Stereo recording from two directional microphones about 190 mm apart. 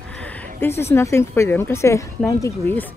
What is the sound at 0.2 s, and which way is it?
A woman's voice, 10° left (ahead or behind).